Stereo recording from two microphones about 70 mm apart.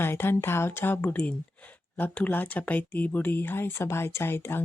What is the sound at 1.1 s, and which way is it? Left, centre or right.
Speech, centre.